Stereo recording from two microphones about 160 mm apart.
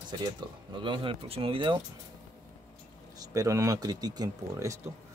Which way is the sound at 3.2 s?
20° right (ahead or behind).